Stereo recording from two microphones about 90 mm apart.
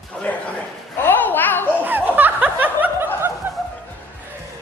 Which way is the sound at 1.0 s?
20° left (ahead or behind).